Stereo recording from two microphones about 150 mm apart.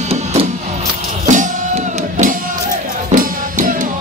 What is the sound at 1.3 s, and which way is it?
Music, 55° right (ahead or behind).